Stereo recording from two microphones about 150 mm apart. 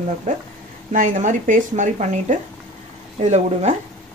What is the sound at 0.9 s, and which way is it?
Speech, 60° right (ahead or behind).